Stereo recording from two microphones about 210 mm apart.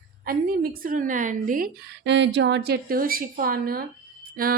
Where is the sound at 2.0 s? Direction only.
60° right (ahead or behind).